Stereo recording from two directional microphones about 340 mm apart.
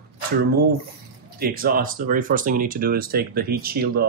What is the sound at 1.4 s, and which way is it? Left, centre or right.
Speech, right.